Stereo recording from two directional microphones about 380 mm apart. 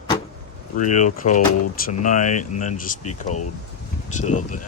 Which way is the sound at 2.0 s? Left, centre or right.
Centre.